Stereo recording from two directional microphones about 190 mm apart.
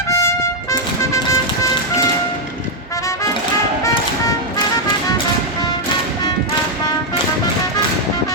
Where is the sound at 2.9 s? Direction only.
15° left (ahead or behind).